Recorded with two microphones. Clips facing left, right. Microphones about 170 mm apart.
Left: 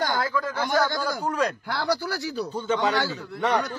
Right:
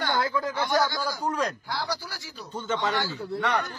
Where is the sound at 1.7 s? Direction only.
70° left (ahead or behind).